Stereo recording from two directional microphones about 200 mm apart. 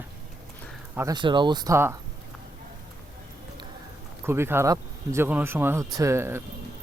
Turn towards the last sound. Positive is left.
turn(degrees=-10)  # may be behind; listen again after turning